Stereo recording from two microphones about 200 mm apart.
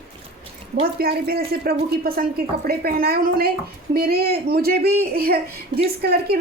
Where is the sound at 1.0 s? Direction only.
50° right (ahead or behind).